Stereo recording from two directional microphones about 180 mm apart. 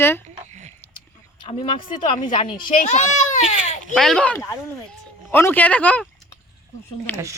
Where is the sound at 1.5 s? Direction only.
30° left (ahead or behind).